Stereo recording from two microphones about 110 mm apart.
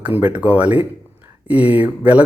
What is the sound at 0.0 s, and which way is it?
Speech, 15° right (ahead or behind).